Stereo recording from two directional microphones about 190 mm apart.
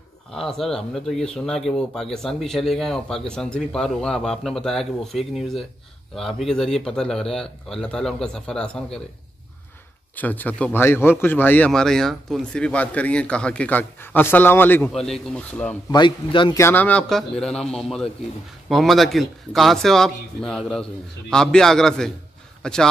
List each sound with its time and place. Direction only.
0.3 s speech: centre (ahead or behind)
10.1 s a man's voice: 10° left (ahead or behind)
15.9 s a man's voice: 25° left (ahead or behind)
16.5 s speech: 10° left (ahead or behind)